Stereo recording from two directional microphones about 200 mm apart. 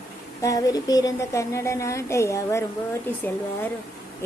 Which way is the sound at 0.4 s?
15° left (ahead or behind).